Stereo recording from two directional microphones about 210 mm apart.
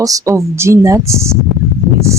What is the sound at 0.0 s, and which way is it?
Speech, 15° right (ahead or behind).